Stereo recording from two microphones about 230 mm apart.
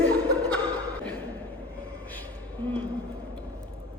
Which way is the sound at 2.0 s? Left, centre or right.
Centre.